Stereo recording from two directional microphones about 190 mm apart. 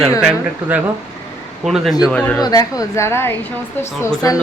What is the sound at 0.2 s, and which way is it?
A woman's voice, 5° right (ahead or behind).